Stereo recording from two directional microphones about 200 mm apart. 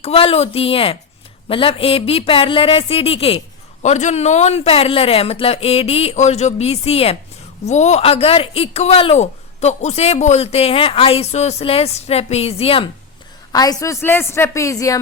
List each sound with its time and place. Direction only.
0.0 s a woman's voice: 30° left (ahead or behind)